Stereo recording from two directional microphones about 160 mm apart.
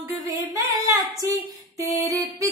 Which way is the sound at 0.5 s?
20° right (ahead or behind).